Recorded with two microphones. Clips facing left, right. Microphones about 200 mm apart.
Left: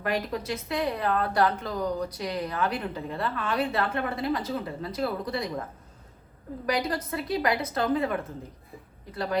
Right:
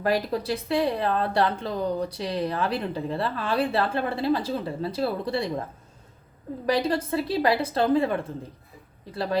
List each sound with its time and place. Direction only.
0.0 s a woman's voice: 35° right (ahead or behind)
6.7 s a woman's voice: 30° right (ahead or behind)